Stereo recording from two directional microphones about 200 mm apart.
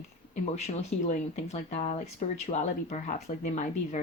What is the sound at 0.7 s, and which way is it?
Speech, 35° left (ahead or behind).